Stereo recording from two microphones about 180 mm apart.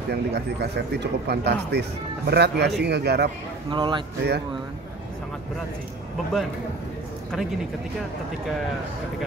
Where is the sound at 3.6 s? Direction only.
25° right (ahead or behind).